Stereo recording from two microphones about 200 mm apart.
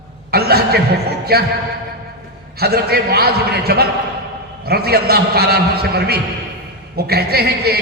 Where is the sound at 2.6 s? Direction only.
50° right (ahead or behind).